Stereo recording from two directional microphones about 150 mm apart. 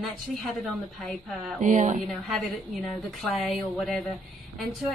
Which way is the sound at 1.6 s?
55° right (ahead or behind).